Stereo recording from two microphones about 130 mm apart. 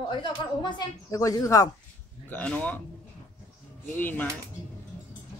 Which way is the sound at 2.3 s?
10° left (ahead or behind).